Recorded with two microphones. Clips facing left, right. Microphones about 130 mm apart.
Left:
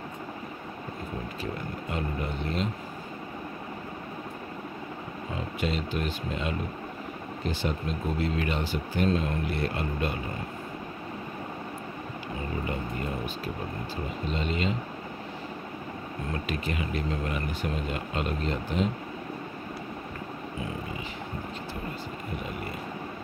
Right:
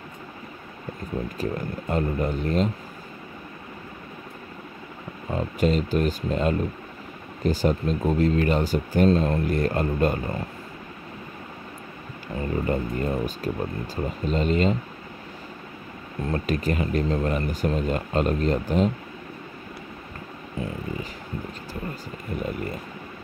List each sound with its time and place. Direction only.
1.4 s speech: 45° right (ahead or behind)
5.3 s speech: 40° right (ahead or behind)
12.6 s speech: 40° right (ahead or behind)
16.3 s speech: 40° right (ahead or behind)